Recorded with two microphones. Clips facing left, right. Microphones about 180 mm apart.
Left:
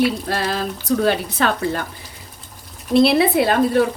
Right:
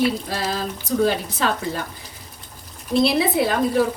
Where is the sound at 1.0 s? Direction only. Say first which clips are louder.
Even; 70° left (ahead or behind).